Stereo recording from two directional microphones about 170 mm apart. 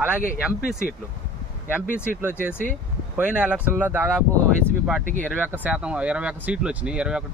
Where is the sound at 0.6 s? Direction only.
65° left (ahead or behind).